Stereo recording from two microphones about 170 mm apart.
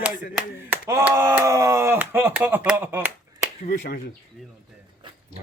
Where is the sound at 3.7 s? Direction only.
50° left (ahead or behind).